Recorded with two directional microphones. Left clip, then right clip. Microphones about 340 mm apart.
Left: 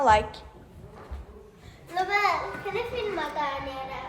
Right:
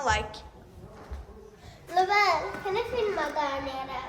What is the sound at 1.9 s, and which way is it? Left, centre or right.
Speech, right.